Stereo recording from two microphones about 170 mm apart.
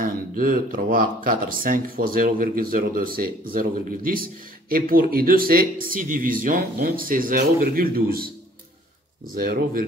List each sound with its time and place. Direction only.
0.0 s speech: 55° right (ahead or behind)
9.3 s speech: 60° right (ahead or behind)